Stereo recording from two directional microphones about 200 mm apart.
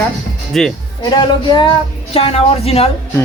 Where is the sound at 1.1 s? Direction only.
20° left (ahead or behind).